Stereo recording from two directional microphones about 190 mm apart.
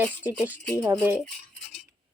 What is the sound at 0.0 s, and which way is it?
Speech, 10° right (ahead or behind).